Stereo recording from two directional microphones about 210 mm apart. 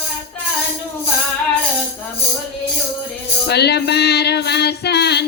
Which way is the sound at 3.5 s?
50° left (ahead or behind).